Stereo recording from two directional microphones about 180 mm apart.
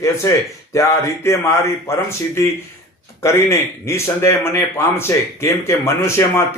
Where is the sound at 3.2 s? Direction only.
15° left (ahead or behind).